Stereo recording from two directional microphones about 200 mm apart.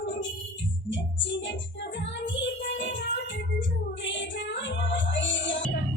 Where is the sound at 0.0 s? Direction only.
65° left (ahead or behind).